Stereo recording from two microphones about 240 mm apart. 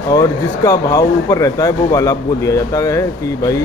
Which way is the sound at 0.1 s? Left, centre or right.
Centre.